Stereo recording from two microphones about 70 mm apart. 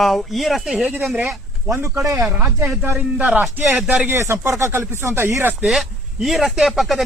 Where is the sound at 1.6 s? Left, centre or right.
Right.